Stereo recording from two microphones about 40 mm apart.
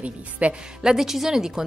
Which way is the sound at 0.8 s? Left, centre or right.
Centre.